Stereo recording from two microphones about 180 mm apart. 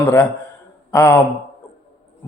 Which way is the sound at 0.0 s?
10° left (ahead or behind).